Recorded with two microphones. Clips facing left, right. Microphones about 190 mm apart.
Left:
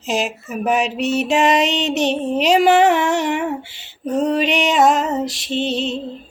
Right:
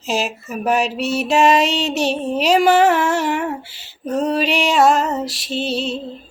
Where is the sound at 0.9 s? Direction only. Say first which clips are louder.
Even; 20° left (ahead or behind).